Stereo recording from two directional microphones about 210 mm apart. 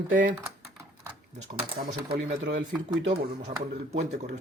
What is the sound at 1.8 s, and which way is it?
Speech, 40° right (ahead or behind).